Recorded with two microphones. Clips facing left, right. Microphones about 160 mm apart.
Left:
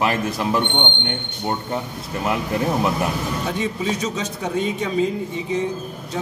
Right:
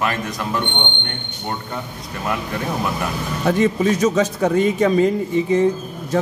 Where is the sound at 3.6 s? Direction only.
70° right (ahead or behind).